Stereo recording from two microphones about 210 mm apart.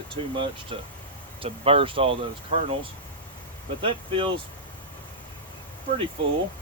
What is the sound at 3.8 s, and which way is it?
Speech, 25° right (ahead or behind).